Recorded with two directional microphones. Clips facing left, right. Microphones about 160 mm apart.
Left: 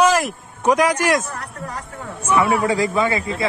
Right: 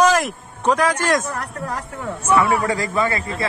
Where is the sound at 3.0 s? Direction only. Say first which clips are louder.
Left 2 dB; 5° left (ahead or behind).